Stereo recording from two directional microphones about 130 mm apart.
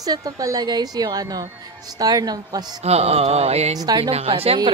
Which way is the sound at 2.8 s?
50° right (ahead or behind).